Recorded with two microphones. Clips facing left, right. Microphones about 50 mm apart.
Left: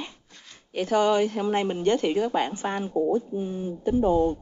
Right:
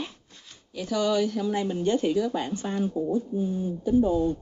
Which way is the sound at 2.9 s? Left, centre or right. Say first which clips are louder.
Left 7 dB; left.